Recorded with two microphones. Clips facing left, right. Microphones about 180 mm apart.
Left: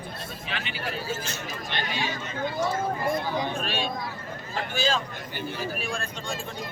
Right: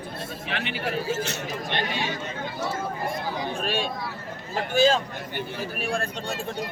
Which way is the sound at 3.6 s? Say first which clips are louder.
Right 2 dB; 45° right (ahead or behind).